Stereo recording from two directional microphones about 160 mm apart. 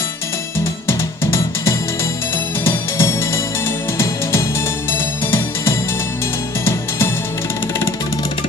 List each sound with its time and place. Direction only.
0.8 s music: 15° left (ahead or behind)